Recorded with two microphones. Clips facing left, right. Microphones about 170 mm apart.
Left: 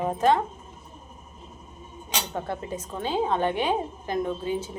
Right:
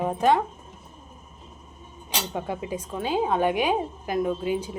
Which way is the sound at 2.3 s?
10° right (ahead or behind).